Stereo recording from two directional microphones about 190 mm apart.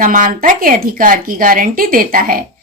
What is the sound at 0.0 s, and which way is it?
A woman's voice, 45° right (ahead or behind).